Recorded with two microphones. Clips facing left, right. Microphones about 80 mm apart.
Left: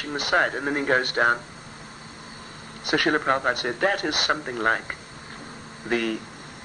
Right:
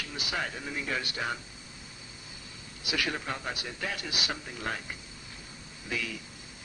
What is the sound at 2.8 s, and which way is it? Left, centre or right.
Speech, left.